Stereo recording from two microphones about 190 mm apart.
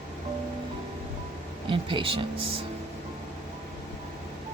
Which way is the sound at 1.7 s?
25° right (ahead or behind).